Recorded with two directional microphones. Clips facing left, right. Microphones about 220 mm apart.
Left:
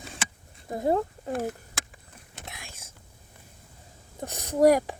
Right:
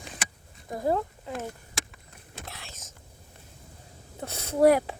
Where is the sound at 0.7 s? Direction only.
25° left (ahead or behind).